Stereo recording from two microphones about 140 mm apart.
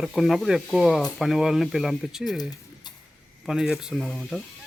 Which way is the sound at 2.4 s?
30° left (ahead or behind).